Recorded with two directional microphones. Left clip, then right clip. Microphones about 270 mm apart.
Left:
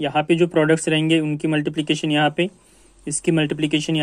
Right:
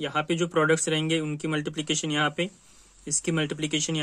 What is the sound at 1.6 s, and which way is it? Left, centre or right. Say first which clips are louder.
Speech: left 7 dB; centre.